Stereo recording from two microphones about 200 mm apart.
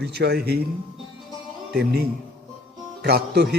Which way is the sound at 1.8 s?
50° right (ahead or behind).